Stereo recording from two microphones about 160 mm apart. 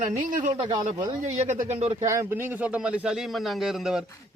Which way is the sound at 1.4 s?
45° right (ahead or behind).